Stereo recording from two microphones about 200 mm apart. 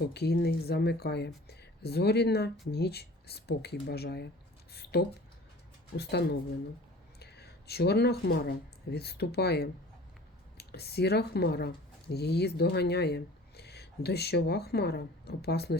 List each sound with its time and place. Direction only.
0.0 s speech: 55° left (ahead or behind)
4.7 s a sound: 55° left (ahead or behind)
6.0 s speech: 55° left (ahead or behind)